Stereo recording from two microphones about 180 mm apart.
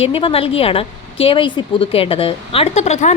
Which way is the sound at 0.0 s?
30° left (ahead or behind).